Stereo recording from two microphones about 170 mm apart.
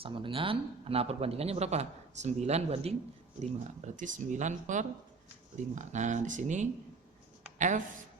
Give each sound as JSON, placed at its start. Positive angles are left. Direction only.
{"t": 0.0, "sound": "speech", "side_deg": -30}